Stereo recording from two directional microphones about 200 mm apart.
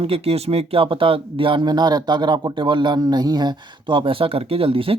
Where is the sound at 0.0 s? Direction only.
30° right (ahead or behind).